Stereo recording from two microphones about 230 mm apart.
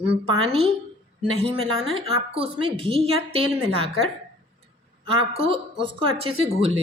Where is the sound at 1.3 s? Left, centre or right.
Right.